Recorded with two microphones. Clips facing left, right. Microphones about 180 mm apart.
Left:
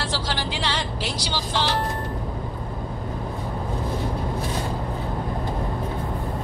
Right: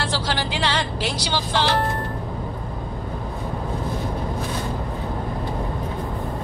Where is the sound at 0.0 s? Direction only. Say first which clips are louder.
Right 3 dB; 65° right (ahead or behind).